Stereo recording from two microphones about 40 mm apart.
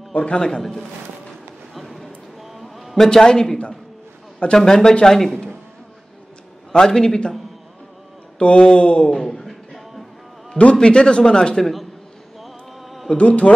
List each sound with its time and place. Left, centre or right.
0.1 s a man's voice: left
0.4 s a man's voice: centre
1.7 s a sound: centre
3.0 s a man's voice: centre
6.7 s a man's voice: centre
8.4 s speech: left
9.1 s a sound: centre
10.6 s speech: left
13.2 s a man's voice: left